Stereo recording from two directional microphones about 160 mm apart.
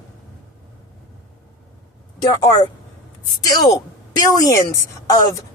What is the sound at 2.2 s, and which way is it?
A woman's voice, 25° left (ahead or behind).